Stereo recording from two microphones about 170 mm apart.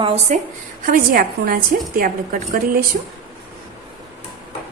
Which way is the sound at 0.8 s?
55° right (ahead or behind).